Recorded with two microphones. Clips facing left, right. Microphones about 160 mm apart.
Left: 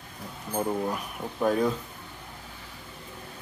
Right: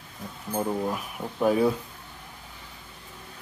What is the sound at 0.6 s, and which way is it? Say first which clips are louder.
Speech: right 1 dB; centre (ahead or behind).